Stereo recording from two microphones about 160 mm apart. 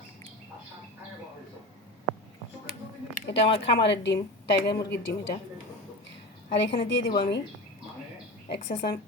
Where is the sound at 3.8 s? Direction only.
90° left.